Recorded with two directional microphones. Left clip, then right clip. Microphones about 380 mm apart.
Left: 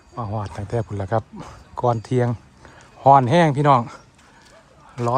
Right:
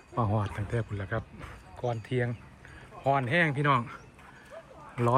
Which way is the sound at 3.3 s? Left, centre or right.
Centre.